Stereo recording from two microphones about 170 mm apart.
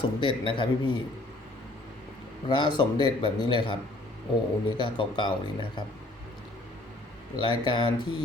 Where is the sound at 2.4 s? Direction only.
25° left (ahead or behind).